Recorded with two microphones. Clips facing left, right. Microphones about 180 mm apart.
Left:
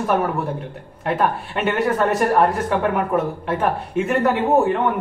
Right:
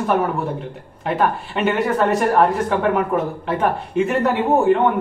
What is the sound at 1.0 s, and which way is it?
Speech, centre (ahead or behind).